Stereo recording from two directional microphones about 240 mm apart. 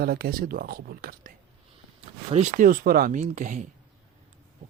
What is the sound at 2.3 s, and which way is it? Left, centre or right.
Speech, right.